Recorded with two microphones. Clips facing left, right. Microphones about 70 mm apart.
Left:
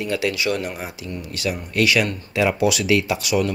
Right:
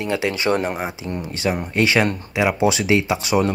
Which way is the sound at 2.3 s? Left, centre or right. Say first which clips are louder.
Even; centre.